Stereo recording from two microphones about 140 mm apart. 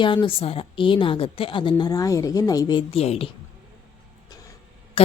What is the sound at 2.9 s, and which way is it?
Speech, 45° left (ahead or behind).